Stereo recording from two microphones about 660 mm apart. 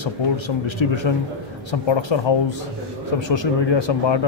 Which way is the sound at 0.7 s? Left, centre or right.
Left.